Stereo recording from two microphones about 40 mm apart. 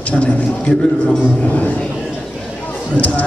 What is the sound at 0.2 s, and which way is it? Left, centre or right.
A man's voice, left.